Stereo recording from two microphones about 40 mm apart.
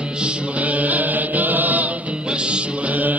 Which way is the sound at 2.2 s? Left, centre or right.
Right.